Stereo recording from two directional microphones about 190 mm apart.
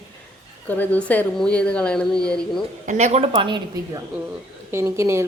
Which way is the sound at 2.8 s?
40° right (ahead or behind).